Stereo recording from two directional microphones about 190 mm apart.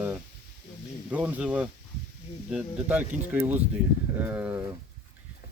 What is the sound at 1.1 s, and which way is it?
Speech, 10° right (ahead or behind).